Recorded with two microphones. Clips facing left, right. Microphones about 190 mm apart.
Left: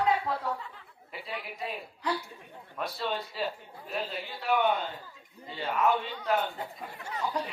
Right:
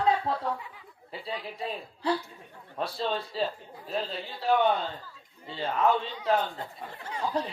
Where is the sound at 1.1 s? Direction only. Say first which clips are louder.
Right 3 dB; 30° right (ahead or behind).